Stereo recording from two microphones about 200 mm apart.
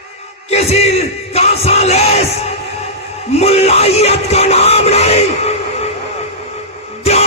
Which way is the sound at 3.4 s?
30° left (ahead or behind).